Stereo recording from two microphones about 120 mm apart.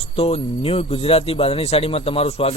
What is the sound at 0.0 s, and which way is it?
Speech, 55° left (ahead or behind).